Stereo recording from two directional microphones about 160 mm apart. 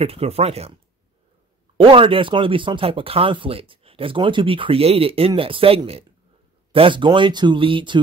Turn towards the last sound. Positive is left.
turn(degrees=-30)  # may be behind; listen again after turning